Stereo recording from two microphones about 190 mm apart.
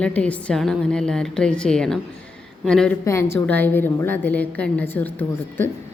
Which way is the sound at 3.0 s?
15° left (ahead or behind).